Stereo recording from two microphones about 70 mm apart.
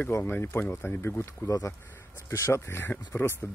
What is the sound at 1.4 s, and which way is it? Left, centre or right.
Speech, left.